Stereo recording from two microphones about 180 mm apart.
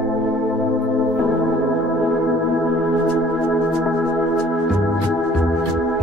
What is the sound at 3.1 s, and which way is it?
Music, centre (ahead or behind).